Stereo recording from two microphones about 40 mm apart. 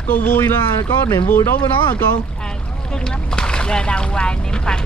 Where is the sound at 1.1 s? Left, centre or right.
Left.